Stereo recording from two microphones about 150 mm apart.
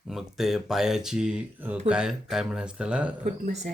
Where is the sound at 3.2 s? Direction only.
55° right (ahead or behind).